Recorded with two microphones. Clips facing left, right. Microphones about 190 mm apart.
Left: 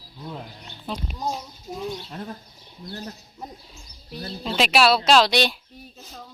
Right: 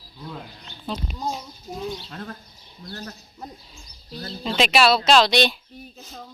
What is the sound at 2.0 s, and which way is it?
Speech, 15° left (ahead or behind).